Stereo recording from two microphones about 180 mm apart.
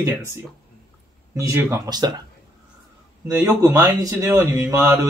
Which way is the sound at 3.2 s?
15° right (ahead or behind).